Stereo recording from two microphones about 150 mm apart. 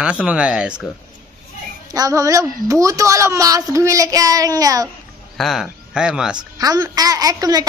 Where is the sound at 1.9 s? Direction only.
25° right (ahead or behind).